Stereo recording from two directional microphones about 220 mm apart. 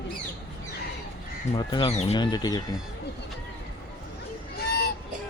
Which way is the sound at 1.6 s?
20° left (ahead or behind).